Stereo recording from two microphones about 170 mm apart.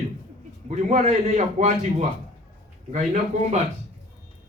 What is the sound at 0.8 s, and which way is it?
A man's voice, 45° right (ahead or behind).